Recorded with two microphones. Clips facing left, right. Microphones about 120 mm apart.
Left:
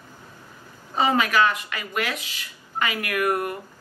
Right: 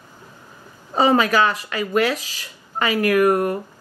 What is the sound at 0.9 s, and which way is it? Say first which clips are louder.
Speech: right 5 dB; 35° right (ahead or behind).